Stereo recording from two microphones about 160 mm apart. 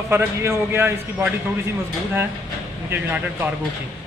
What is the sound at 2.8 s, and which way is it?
Speech, 10° right (ahead or behind).